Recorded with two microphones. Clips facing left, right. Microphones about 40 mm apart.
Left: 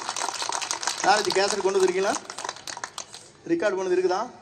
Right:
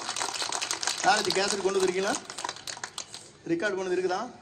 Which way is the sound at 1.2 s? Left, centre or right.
Right.